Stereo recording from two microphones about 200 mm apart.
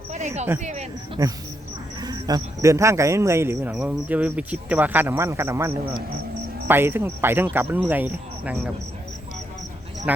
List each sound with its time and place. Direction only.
0.6 s speech: 35° right (ahead or behind)
2.0 s speech: 20° right (ahead or behind)
10.1 s speech: 5° right (ahead or behind)